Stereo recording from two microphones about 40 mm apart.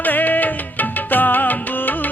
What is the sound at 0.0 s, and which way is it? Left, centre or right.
Music, left.